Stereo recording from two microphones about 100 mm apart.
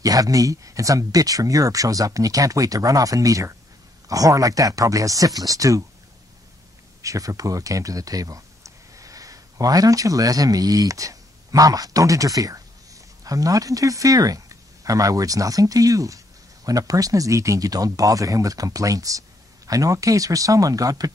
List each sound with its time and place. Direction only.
0.0 s speech: 35° right (ahead or behind)
7.0 s speech: 35° right (ahead or behind)